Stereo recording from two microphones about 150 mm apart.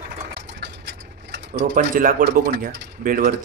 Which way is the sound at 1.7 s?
65° right (ahead or behind).